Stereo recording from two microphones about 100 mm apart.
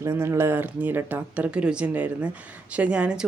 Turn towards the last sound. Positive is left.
turn(degrees=-10)  # may be behind; listen again after turning